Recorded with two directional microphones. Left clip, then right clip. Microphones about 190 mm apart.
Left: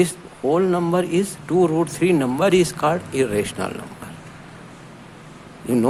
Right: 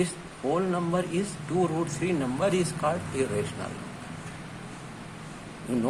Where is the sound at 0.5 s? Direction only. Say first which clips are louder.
Left 9 dB; 35° left (ahead or behind).